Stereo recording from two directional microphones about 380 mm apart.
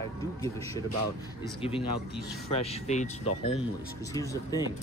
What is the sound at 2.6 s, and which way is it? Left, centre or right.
Speech, centre.